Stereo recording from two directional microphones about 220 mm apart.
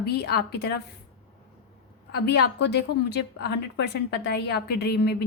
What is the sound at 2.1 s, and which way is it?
A woman's voice, 45° left (ahead or behind).